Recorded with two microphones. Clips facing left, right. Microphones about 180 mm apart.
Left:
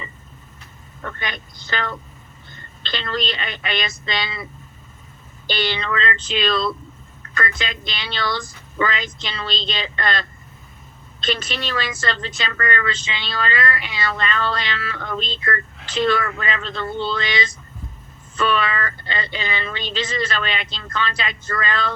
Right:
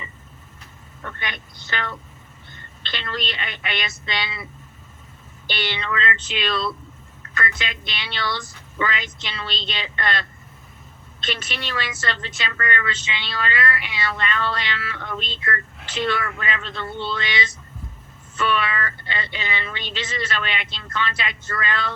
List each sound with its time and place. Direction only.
1.2 s a woman's voice: 40° left (ahead or behind)
5.5 s a woman's voice: 40° left (ahead or behind)
11.3 s a woman's voice: 40° left (ahead or behind)
18.3 s a woman's voice: 40° left (ahead or behind)